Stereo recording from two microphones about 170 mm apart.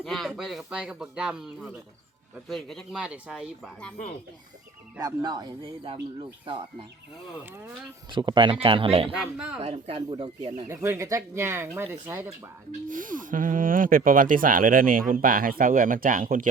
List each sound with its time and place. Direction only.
0.0 s speech: centre (ahead or behind)
4.9 s speech: 25° right (ahead or behind)
8.1 s speech: 30° right (ahead or behind)
9.1 s speech: 5° right (ahead or behind)
9.6 s speech: 40° right (ahead or behind)
10.7 s speech: 15° right (ahead or behind)
12.9 s speech: 50° right (ahead or behind)